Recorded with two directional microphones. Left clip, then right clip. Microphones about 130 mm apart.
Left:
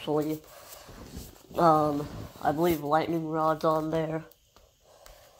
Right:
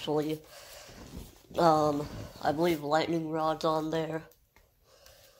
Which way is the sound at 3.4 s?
25° left (ahead or behind).